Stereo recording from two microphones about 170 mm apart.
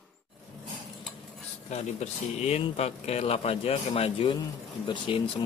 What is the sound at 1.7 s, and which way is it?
Speech, 40° left (ahead or behind).